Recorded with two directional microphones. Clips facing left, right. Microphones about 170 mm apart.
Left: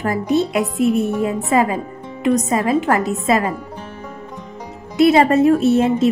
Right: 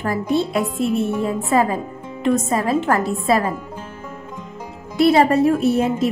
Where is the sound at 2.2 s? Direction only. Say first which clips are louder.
Left 2 dB; 20° left (ahead or behind).